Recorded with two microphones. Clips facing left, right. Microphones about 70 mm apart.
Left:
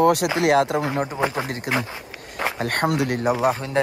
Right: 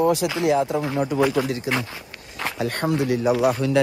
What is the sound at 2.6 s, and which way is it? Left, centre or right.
Speech, left.